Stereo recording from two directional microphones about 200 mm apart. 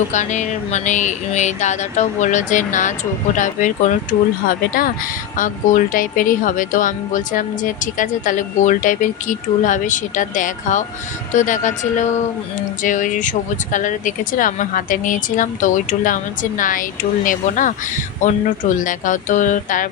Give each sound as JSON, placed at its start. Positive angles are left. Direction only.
{"t": 0.1, "sound": "speech", "side_deg": 35}